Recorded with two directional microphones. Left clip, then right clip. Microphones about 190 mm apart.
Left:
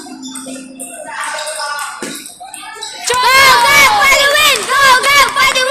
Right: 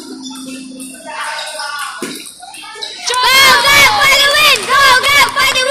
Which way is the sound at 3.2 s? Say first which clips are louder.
Even; centre (ahead or behind).